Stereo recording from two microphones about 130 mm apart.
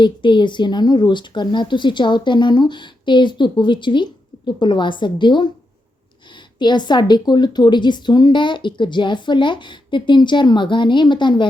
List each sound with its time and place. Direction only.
0.0 s speech: 40° left (ahead or behind)
6.6 s speech: 35° left (ahead or behind)